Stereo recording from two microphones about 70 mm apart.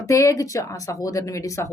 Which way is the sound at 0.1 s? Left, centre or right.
Left.